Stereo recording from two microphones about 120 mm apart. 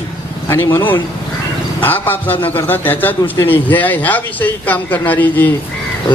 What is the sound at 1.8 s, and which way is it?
A man's voice, 15° left (ahead or behind).